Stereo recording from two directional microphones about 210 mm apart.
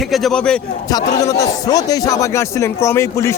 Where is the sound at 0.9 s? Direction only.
15° left (ahead or behind).